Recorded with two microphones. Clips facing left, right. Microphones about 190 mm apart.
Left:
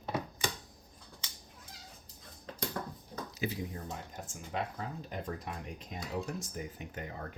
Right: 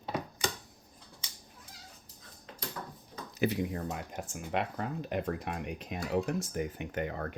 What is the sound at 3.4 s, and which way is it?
Speech, 70° right (ahead or behind).